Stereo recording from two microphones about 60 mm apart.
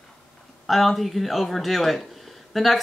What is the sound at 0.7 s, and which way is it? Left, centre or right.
Speech, centre.